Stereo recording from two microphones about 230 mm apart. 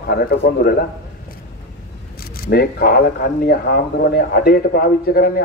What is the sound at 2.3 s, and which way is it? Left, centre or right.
Speech, left.